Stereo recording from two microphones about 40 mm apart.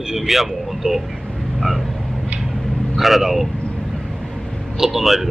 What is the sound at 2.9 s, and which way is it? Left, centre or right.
Speech, centre.